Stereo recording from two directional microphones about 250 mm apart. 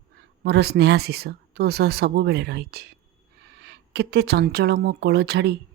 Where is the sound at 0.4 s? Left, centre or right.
Right.